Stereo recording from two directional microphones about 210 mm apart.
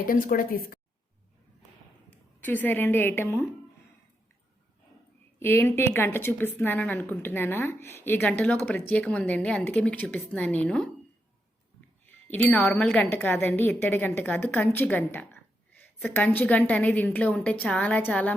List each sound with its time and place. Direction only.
0.0 s speech: 40° left (ahead or behind)
2.4 s speech: 10° left (ahead or behind)
5.4 s speech: 10° left (ahead or behind)
12.0 s speech: 10° left (ahead or behind)